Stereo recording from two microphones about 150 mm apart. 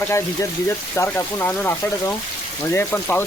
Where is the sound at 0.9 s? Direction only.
15° left (ahead or behind).